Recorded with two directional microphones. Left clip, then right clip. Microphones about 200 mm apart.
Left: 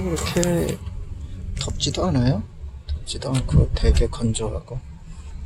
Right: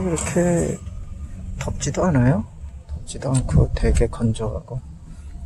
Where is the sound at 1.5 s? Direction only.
5° left (ahead or behind).